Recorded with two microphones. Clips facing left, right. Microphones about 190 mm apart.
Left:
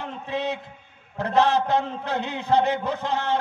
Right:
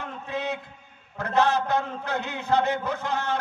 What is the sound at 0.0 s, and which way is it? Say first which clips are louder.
A man's voice: left 3 dB; 25° left (ahead or behind).